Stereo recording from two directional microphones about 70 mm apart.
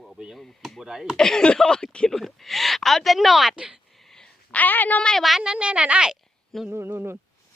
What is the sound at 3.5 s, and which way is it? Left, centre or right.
Speech, centre.